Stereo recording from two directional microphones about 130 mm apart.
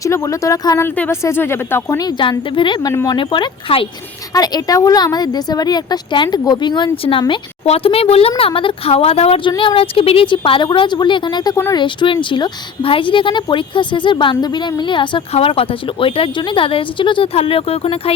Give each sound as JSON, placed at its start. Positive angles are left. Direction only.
{"t": 0.0, "sound": "speech", "side_deg": 25}
{"t": 0.9, "sound": "speech", "side_deg": 15}
{"t": 2.0, "sound": "speech", "side_deg": 35}
{"t": 4.4, "sound": "a woman's voice", "side_deg": 30}
{"t": 9.5, "sound": "speech", "side_deg": 40}